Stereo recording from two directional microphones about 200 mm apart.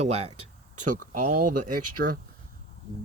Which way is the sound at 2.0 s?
50° right (ahead or behind).